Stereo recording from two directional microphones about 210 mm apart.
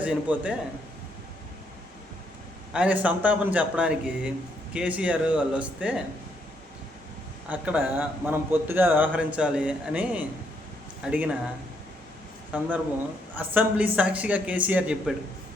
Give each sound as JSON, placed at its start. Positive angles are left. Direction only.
{"t": 0.0, "sound": "a man's voice", "side_deg": -5}
{"t": 2.7, "sound": "a man's voice", "side_deg": -5}
{"t": 7.5, "sound": "a man's voice", "side_deg": -5}
{"t": 12.5, "sound": "a man's voice", "side_deg": -10}